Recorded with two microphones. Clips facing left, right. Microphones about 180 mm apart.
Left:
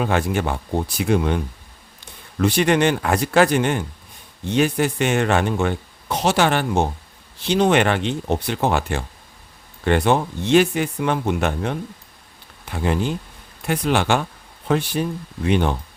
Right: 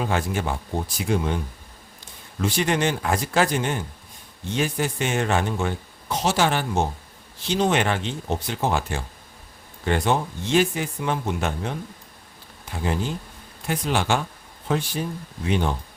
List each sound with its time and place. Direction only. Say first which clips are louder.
0.0 s speech: left 4 dB; 65° left (ahead or behind)
2.4 s speech: left 6 dB; 65° left (ahead or behind)
12.7 s speech: left 4 dB; 65° left (ahead or behind)